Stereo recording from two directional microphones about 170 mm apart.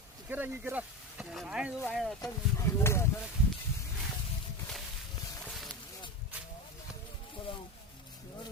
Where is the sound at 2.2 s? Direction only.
15° left (ahead or behind).